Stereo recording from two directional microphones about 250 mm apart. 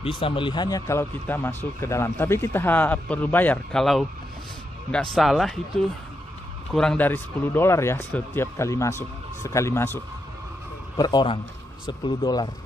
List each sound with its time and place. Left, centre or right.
0.0 s speech: left